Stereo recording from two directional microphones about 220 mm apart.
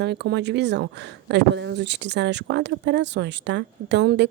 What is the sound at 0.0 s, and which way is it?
Speech, 50° right (ahead or behind).